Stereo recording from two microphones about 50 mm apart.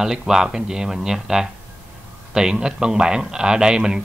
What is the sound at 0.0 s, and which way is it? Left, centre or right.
A man's voice, centre.